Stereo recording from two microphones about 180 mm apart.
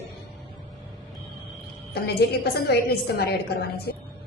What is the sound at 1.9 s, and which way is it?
A woman's voice, 65° left (ahead or behind).